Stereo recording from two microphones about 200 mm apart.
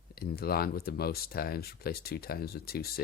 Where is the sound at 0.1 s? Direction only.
50° left (ahead or behind).